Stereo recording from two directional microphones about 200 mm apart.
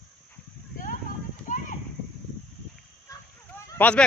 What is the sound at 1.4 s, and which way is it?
Clip-clop, 40° left (ahead or behind).